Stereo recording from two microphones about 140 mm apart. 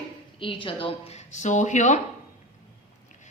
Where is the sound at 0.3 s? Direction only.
40° left (ahead or behind); by 2.0 s 60° left (ahead or behind).